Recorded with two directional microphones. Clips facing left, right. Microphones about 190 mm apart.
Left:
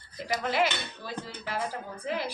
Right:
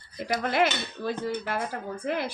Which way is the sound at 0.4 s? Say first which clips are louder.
Right 3 dB; 50° right (ahead or behind).